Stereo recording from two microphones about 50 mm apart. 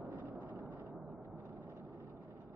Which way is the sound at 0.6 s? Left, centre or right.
Right.